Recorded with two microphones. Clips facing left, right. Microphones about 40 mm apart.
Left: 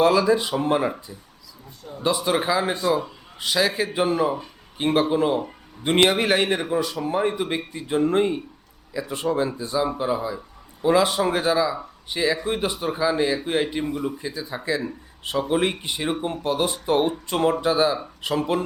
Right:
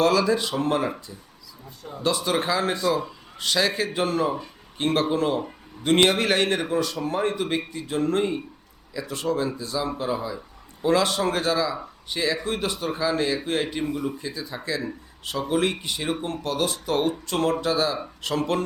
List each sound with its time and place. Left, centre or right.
0.0 s a man's voice: centre